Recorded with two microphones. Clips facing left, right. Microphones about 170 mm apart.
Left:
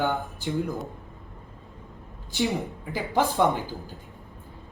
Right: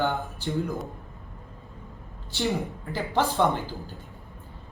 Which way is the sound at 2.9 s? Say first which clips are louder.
Left 1 dB; 15° left (ahead or behind).